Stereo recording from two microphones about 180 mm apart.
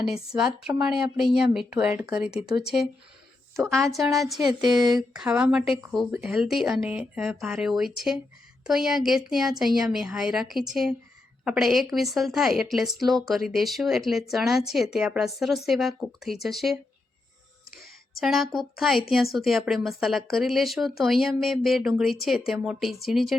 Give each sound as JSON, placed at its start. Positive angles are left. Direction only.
{"t": 0.0, "sound": "a woman's voice", "side_deg": -5}
{"t": 3.9, "sound": "a woman's voice", "side_deg": 0}
{"t": 17.7, "sound": "a sound", "side_deg": 55}
{"t": 18.2, "sound": "a woman's voice", "side_deg": 0}